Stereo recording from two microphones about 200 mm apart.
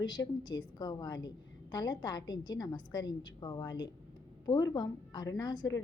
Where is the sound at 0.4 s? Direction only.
20° left (ahead or behind).